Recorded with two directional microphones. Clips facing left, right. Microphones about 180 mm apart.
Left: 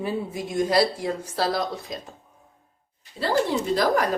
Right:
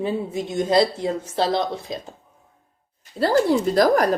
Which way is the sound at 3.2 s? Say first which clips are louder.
Right 5 dB; 40° right (ahead or behind).